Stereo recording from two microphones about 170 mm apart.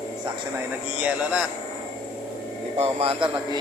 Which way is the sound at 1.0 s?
5° right (ahead or behind).